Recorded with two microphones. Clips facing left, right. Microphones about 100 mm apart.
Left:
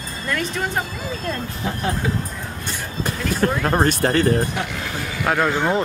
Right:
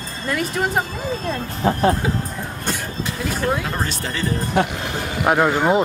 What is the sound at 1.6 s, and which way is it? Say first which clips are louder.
Speech: right 8 dB; 45° right (ahead or behind).